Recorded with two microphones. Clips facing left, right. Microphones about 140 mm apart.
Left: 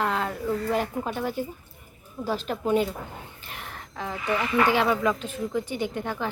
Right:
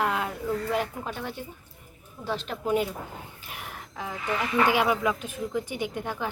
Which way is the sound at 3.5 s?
10° right (ahead or behind).